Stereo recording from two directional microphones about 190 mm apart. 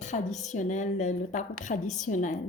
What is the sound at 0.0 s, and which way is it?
A woman's voice, 40° left (ahead or behind).